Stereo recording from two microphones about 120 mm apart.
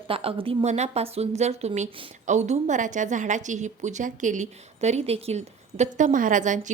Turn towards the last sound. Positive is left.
turn(degrees=-90)